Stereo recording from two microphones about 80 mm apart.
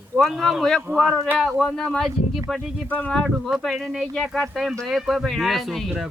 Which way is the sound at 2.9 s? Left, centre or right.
Centre.